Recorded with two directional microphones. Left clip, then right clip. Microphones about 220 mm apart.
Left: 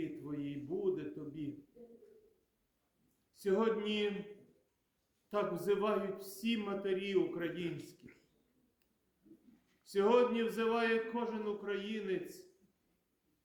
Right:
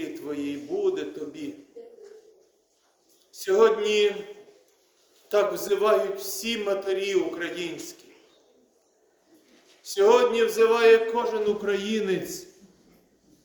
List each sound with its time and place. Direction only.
0.3 s a man's voice: 5° left (ahead or behind)
3.3 s a man's voice: 5° left (ahead or behind)
5.3 s a man's voice: 5° left (ahead or behind)
9.9 s a man's voice: 5° left (ahead or behind)